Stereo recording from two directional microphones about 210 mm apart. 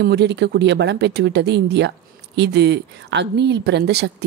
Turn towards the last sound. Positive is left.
turn(degrees=-50)  # may be behind; listen again after turning